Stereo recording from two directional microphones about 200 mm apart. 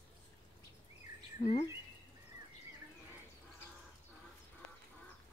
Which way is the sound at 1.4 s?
35° left (ahead or behind).